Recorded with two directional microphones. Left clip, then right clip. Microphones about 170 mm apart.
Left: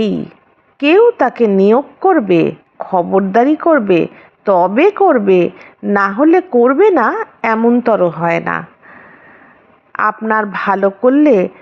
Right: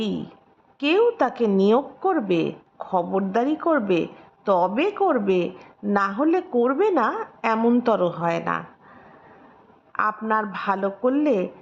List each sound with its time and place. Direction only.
0.0 s speech: 30° left (ahead or behind)
9.9 s speech: 30° left (ahead or behind)